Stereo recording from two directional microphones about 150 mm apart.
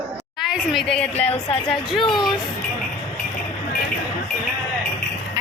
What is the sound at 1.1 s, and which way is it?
Speech, 40° left (ahead or behind).